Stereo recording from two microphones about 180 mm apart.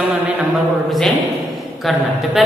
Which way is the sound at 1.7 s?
Centre (ahead or behind).